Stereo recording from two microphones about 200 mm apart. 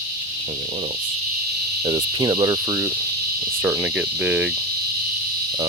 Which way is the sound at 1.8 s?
20° right (ahead or behind).